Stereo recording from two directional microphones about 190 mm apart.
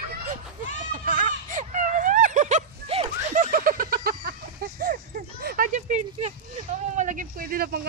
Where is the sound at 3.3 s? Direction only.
45° right (ahead or behind).